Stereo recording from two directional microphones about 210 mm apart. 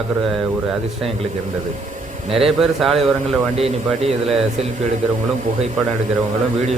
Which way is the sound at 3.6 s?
30° right (ahead or behind).